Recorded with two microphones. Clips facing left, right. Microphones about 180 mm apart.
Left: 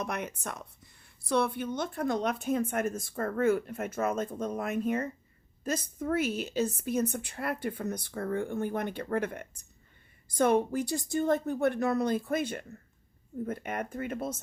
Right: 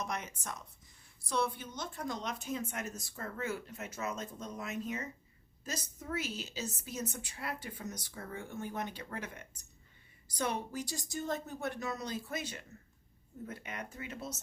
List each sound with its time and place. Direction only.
0.0 s a woman's voice: 60° left (ahead or behind)